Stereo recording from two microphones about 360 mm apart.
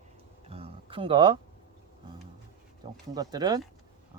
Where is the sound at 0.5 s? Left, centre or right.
Centre.